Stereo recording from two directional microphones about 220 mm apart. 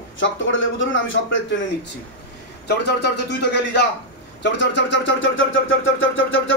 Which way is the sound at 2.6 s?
50° left (ahead or behind).